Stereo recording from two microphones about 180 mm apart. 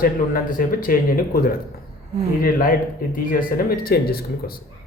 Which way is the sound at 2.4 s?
50° left (ahead or behind).